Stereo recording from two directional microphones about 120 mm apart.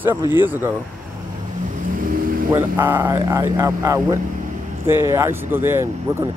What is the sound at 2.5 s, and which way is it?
Speech, 20° right (ahead or behind).